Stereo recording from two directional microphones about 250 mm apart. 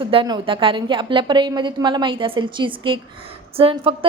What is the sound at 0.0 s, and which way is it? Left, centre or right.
A woman's voice, right.